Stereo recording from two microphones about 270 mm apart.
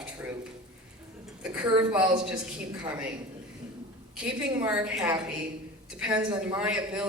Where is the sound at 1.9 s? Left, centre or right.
Centre.